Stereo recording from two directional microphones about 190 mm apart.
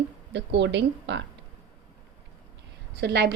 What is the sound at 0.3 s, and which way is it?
Speech, 65° right (ahead or behind).